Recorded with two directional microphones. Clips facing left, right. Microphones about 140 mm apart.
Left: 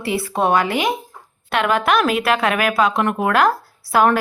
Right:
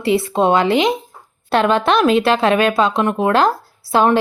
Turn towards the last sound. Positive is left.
turn(degrees=-25)  # may be behind; listen again after turning